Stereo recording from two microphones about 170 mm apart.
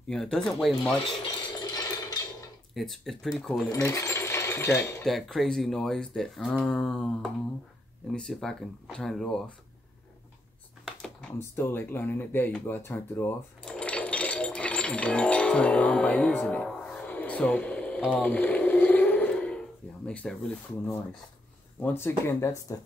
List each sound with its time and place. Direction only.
0.1 s speech: centre (ahead or behind)
1.4 s ratchet: 20° left (ahead or behind)
2.7 s speech: centre (ahead or behind)
3.7 s coin: 20° left (ahead or behind)
5.0 s speech: centre (ahead or behind)
10.9 s computer keyboard: 5° left (ahead or behind)
18.2 s a sound: 10° left (ahead or behind)
20.1 s speech: 5° left (ahead or behind)